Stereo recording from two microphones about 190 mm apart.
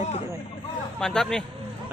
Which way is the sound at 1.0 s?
5° left (ahead or behind).